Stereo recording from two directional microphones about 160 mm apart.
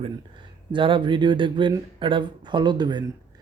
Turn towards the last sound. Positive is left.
turn(degrees=-25)  # may be behind; listen again after turning